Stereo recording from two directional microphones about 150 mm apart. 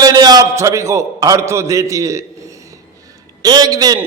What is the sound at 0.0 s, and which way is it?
A man's voice, 25° right (ahead or behind).